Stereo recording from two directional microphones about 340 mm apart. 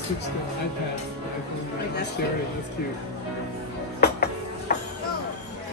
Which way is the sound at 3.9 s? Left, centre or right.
Left.